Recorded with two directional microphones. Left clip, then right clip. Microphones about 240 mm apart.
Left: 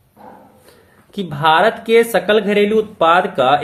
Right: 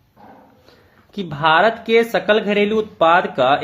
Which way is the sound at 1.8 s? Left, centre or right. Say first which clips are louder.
Left 3 dB; right.